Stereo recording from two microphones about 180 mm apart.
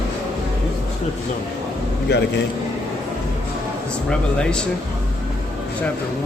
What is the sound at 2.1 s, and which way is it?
Speech, 65° left (ahead or behind).